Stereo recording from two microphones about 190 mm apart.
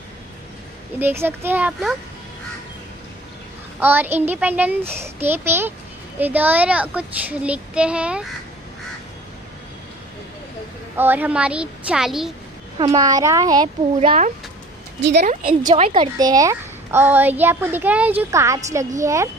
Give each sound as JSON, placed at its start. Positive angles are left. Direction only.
{"t": 0.9, "sound": "a woman's voice", "side_deg": -10}
{"t": 3.8, "sound": "a woman's voice", "side_deg": -10}
{"t": 11.0, "sound": "a woman's voice", "side_deg": -10}
{"t": 12.7, "sound": "a child's voice", "side_deg": -20}
{"t": 13.9, "sound": "speech", "side_deg": -35}
{"t": 15.6, "sound": "a woman's voice", "side_deg": -30}